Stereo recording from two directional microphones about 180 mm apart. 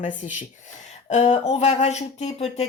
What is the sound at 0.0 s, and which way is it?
Speech, 45° left (ahead or behind).